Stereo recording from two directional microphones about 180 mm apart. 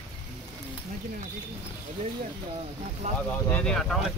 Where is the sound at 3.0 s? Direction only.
40° right (ahead or behind).